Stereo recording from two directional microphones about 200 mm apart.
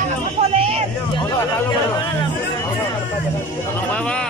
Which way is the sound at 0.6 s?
30° right (ahead or behind).